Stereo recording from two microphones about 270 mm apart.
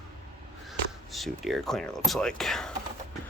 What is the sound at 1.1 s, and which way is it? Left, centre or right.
Speech, centre.